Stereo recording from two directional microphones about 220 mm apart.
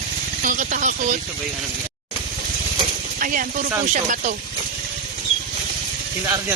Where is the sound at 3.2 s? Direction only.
40° right (ahead or behind).